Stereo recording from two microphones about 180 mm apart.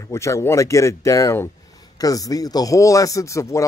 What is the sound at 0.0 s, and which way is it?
Speech, 15° left (ahead or behind).